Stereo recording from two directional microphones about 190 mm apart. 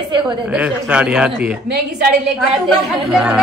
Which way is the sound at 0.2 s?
5° right (ahead or behind).